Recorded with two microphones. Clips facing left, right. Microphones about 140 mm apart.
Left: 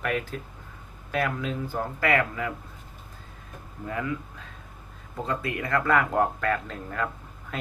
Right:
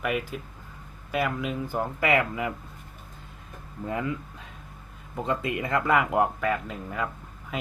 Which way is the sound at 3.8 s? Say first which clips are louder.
Right 2 dB; 25° right (ahead or behind).